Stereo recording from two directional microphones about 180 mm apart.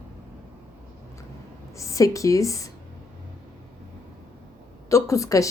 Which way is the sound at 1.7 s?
15° left (ahead or behind).